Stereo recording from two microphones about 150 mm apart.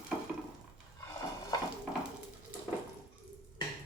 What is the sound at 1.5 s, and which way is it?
Dishes, 25° left (ahead or behind).